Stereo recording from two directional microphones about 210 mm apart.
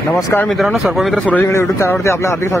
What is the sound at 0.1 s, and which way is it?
Speech, 10° left (ahead or behind).